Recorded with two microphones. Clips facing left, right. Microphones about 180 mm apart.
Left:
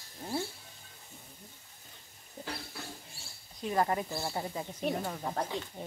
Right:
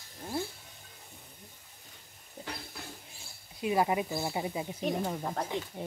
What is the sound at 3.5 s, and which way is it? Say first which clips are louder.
Speech: right 2 dB; 10° right (ahead or behind).